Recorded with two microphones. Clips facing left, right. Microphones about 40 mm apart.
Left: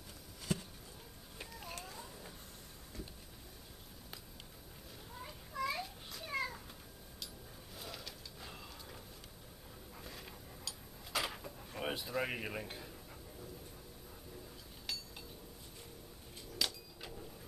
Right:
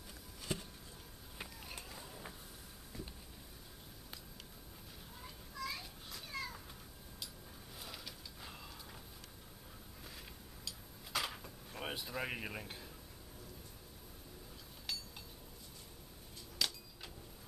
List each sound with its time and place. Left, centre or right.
1.7 s a sound: centre
5.5 s children playing: left
5.8 s children playing: centre
6.2 s cat: left
6.5 s cat: centre
7.7 s a sound: centre
10.0 s drawer open or close: centre
14.9 s chink: centre
16.5 s a sound: centre